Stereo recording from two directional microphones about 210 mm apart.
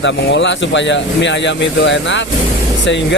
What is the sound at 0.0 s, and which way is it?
Speech, 60° left (ahead or behind).